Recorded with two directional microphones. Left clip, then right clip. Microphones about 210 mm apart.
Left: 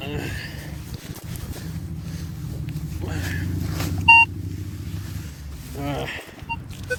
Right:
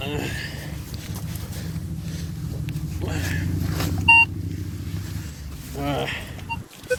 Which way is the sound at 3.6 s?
15° right (ahead or behind).